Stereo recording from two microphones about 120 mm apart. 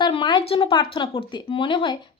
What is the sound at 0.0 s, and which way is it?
Speech, 40° left (ahead or behind).